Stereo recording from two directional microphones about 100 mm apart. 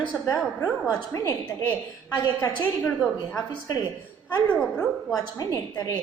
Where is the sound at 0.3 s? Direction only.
35° left (ahead or behind).